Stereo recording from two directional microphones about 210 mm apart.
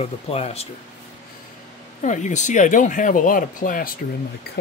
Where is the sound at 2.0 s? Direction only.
35° left (ahead or behind).